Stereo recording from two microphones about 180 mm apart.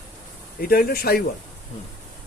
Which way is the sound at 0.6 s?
55° left (ahead or behind).